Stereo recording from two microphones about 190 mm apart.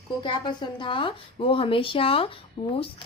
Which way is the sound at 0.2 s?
25° left (ahead or behind).